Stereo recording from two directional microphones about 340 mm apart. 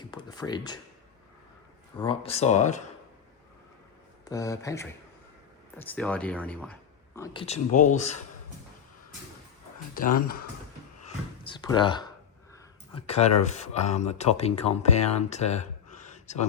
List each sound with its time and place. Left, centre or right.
0.0 s a sound: centre
2.0 s speech: centre
4.3 s speech: centre
7.2 s speech: centre
9.9 s speech: left
11.4 s speech: centre